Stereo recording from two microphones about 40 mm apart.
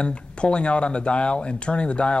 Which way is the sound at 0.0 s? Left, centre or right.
Left.